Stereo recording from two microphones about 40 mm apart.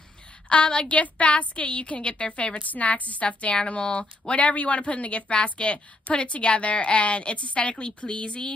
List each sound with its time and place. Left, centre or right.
0.5 s a woman's voice: left